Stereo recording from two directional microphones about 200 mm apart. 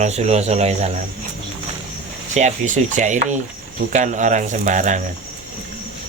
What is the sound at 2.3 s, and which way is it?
Speech, 40° right (ahead or behind).